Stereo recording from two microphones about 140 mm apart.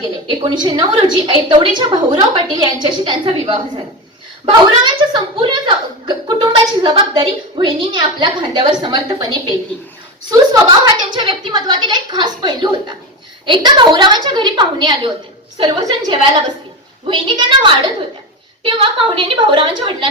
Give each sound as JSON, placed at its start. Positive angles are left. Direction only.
{"t": 0.0, "sound": "speech", "side_deg": -30}
{"t": 4.8, "sound": "speech", "side_deg": -35}